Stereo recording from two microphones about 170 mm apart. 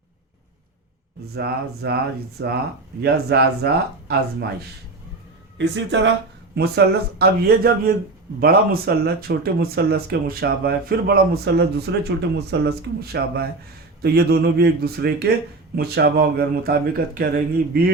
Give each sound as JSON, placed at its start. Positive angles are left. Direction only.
{"t": 1.3, "sound": "speech", "side_deg": -75}
{"t": 2.4, "sound": "speech", "side_deg": -90}
{"t": 3.0, "sound": "speech", "side_deg": -75}
{"t": 5.5, "sound": "speech", "side_deg": -90}
{"t": 6.6, "sound": "speech", "side_deg": -70}